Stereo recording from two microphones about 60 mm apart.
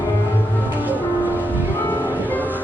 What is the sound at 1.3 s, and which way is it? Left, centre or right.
Music, left.